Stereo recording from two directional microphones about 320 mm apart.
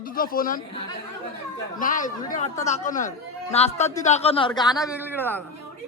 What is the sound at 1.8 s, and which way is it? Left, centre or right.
A man's voice, left.